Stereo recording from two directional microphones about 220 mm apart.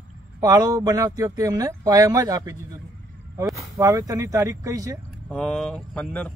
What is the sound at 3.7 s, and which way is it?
Speech, 15° right (ahead or behind).